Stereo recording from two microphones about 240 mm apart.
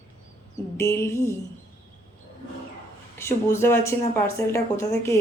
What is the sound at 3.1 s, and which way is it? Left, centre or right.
Speech, centre.